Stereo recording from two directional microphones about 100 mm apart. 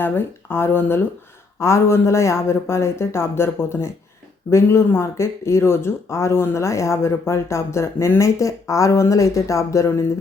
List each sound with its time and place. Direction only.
0.0 s speech: 20° left (ahead or behind)